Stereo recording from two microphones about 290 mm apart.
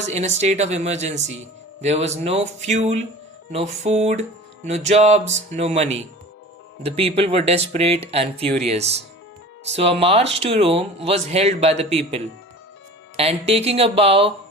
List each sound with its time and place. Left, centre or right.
0.1 s speech: right